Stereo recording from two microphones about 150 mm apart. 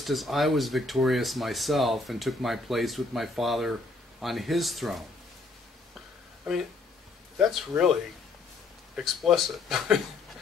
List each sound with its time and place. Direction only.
0.0 s speech: centre (ahead or behind)
7.3 s speech: 10° right (ahead or behind)
8.9 s speech: centre (ahead or behind)